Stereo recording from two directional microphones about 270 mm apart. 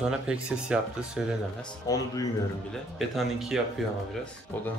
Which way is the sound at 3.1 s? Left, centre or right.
Centre.